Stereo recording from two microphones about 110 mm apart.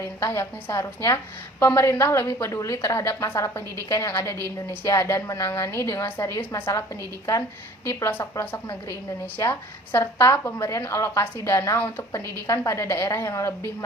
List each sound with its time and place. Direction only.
0.0 s a woman's voice: 25° left (ahead or behind)
7.9 s a woman's voice: 25° left (ahead or behind)